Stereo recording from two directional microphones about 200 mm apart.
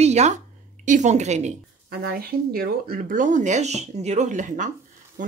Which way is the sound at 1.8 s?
50° right (ahead or behind).